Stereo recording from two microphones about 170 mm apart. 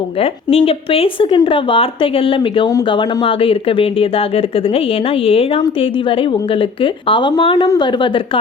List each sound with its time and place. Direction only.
0.2 s speech: 35° left (ahead or behind)